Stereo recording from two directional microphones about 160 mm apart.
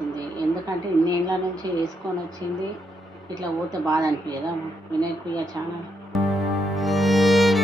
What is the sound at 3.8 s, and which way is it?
Speech, 20° right (ahead or behind).